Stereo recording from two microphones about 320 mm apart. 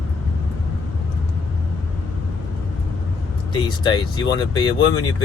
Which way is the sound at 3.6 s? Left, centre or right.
Centre.